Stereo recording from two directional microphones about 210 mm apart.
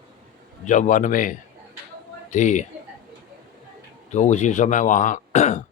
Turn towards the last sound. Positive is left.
turn(degrees=35)  # may be behind; listen again after turning